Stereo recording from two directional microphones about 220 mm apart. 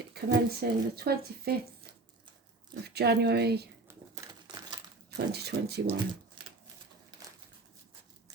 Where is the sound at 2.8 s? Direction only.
45° right (ahead or behind).